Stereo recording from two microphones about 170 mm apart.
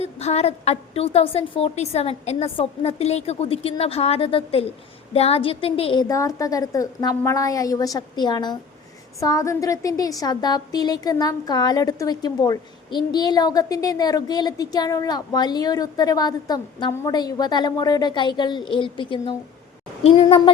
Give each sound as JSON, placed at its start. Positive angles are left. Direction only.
{"t": 0.0, "sound": "a woman's voice", "side_deg": 40}